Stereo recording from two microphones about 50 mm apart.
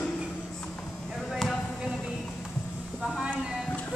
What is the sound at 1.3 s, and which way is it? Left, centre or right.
Basketball bounce, centre.